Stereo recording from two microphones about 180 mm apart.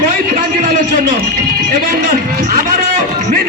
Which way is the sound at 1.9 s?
55° right (ahead or behind).